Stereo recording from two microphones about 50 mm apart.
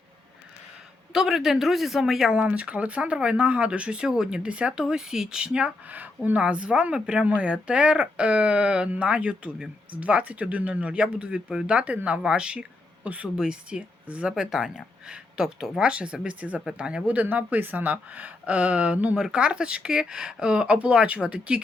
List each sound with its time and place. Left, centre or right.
1.1 s speech: centre
2.3 s speech: right
5.9 s speech: right
17.2 s speech: right